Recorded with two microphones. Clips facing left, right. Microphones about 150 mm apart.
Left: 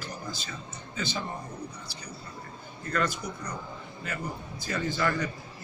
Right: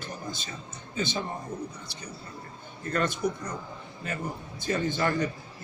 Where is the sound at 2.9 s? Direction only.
25° right (ahead or behind).